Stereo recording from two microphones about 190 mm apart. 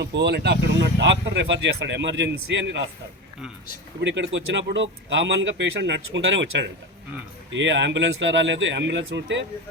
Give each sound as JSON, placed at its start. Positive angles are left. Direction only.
{"t": 0.0, "sound": "speech", "side_deg": -60}
{"t": 4.0, "sound": "speech", "side_deg": -70}